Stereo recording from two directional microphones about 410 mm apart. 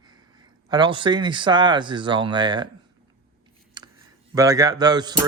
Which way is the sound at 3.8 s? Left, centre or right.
Centre.